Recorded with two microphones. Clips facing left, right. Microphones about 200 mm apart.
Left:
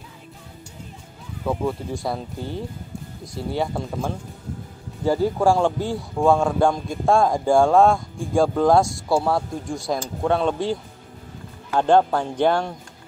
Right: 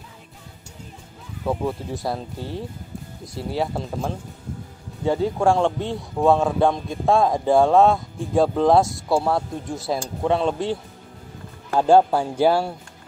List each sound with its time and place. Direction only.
1.4 s a man's voice: centre (ahead or behind)
11.8 s a man's voice: 10° right (ahead or behind)